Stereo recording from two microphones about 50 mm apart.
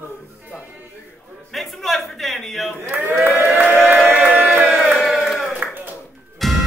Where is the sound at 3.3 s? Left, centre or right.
Left.